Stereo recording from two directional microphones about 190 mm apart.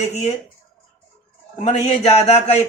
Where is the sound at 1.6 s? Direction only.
35° left (ahead or behind).